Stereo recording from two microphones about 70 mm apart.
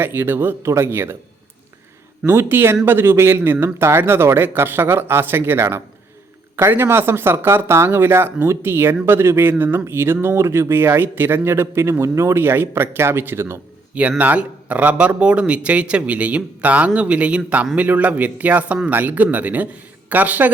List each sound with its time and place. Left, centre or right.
0.0 s speech: right
2.2 s speech: right
14.2 s a man's voice: right